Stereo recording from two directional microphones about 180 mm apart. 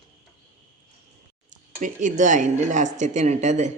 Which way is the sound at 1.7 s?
45° right (ahead or behind).